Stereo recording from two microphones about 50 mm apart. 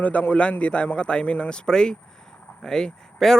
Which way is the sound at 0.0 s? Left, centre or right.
Left.